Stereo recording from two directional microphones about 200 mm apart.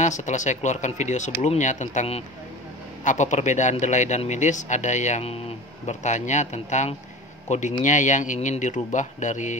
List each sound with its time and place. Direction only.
0.0 s speech: 35° left (ahead or behind)